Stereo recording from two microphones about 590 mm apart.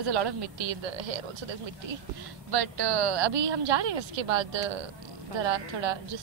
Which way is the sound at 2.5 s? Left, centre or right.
Right.